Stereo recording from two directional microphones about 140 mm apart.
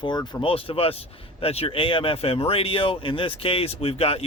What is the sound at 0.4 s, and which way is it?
Speech, 40° left (ahead or behind).